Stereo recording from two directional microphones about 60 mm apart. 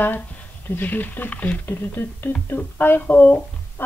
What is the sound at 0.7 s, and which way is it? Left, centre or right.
A woman's voice, left.